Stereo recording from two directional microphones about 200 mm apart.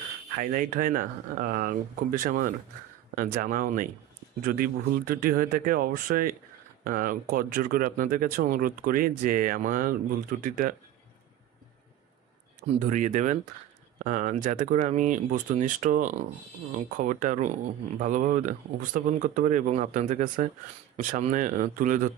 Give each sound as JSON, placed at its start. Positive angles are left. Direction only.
{"t": 0.4, "sound": "speech", "side_deg": -40}
{"t": 12.6, "sound": "speech", "side_deg": -40}